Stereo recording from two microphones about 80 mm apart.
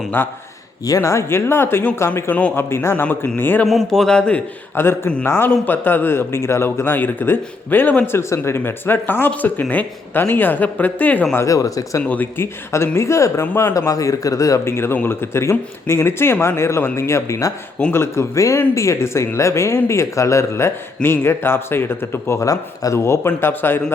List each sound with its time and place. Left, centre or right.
0.2 s speech: left
0.9 s speech: left
2.3 s speech: centre
2.6 s speech: left
2.9 s speech: left
3.8 s speech: centre
4.7 s speech: left
11.3 s a man's voice: left
12.0 s speech: left
12.7 s a man's voice: left
22.4 s speech: left